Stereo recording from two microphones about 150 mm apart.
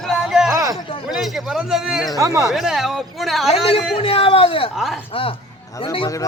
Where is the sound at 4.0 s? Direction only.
35° left (ahead or behind).